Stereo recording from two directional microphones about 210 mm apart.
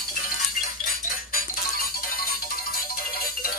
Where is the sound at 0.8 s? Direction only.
45° left (ahead or behind).